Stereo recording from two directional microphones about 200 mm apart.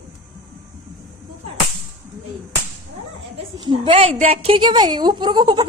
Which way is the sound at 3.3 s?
25° right (ahead or behind).